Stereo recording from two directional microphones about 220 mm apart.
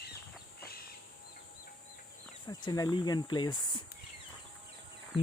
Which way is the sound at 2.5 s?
15° left (ahead or behind).